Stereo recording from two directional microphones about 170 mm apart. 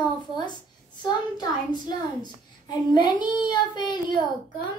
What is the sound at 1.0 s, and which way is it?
A child's voice, 25° left (ahead or behind).